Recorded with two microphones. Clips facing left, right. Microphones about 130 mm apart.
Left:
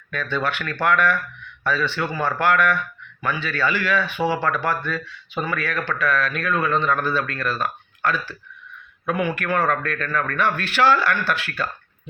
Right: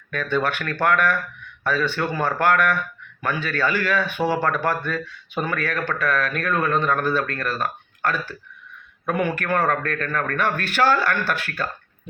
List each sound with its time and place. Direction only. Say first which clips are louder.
0.1 s a man's voice: right 2 dB; 50° right (ahead or behind)